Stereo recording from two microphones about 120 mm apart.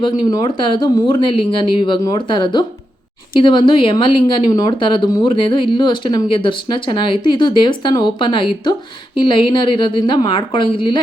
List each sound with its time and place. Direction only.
0.0 s speech: 35° left (ahead or behind)